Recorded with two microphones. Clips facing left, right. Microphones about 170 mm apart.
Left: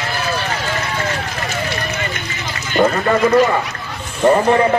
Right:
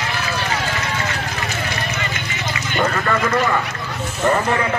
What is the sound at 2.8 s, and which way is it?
A man's voice, 30° left (ahead or behind).